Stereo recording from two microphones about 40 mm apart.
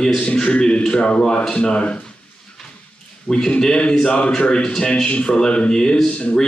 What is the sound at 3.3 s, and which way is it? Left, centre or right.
A man's voice, left.